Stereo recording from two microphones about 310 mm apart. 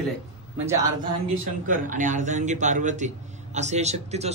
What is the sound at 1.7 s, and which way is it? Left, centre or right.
A man's voice, right.